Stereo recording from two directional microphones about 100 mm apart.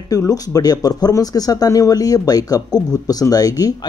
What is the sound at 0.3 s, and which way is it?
Speech, 40° left (ahead or behind).